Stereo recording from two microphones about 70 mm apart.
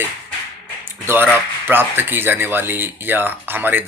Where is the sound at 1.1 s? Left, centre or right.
Right.